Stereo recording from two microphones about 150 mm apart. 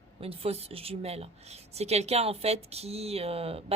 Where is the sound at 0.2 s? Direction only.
40° right (ahead or behind).